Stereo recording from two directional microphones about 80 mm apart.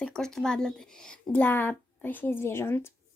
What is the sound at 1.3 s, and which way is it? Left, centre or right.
Speech, left.